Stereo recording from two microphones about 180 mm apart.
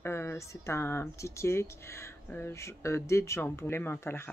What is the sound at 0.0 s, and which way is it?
Speech, 15° left (ahead or behind).